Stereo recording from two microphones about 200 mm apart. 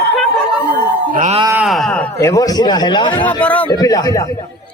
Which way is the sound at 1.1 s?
40° right (ahead or behind).